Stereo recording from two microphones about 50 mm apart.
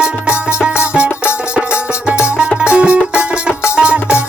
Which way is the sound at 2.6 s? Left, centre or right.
Right.